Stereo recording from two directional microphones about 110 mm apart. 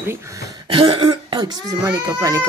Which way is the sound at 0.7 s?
55° right (ahead or behind).